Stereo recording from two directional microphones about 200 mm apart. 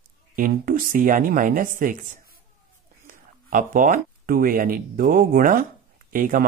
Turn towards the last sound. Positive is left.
turn(degrees=-40)  # may be behind; listen again after turning